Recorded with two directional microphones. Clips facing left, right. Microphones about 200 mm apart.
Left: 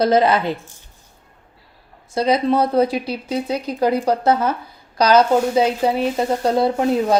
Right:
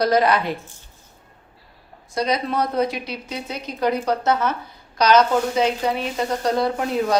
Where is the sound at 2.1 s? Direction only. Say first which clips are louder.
Left 5 dB; 30° left (ahead or behind).